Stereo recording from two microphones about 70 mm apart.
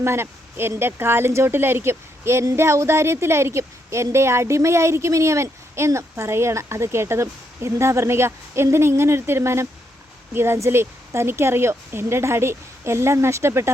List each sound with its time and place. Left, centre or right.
0.0 s speech: right